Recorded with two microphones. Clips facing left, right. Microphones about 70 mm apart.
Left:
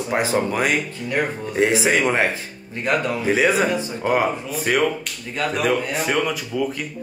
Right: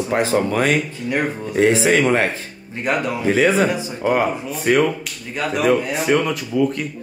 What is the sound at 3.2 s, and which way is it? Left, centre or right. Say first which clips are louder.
A man's voice: right 3 dB; centre.